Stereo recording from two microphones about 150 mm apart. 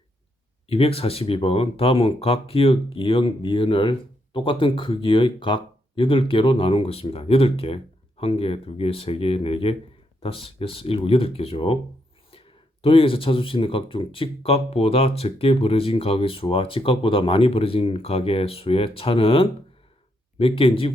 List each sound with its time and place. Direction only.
0.7 s speech: 40° left (ahead or behind)
12.8 s speech: 35° left (ahead or behind)